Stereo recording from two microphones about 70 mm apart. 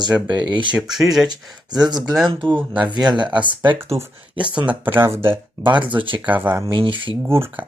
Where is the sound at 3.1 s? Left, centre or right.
Right.